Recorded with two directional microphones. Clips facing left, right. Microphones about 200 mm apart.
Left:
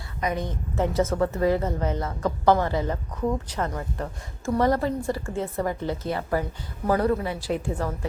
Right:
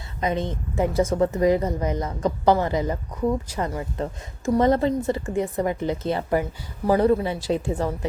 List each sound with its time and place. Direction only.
0.2 s a woman's voice: 25° right (ahead or behind)
0.8 s a woman's voice: 15° right (ahead or behind)